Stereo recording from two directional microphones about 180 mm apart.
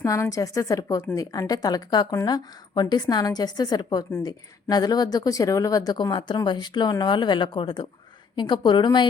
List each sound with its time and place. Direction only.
0.0 s a woman's voice: 15° left (ahead or behind)